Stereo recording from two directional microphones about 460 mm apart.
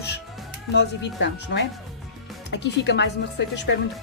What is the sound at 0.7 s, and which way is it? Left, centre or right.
Speech, left.